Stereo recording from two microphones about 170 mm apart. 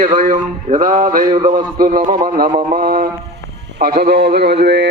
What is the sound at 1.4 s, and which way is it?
Speech, 25° right (ahead or behind).